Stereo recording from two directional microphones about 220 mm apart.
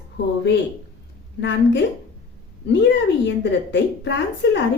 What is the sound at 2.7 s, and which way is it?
A woman's voice, 50° left (ahead or behind).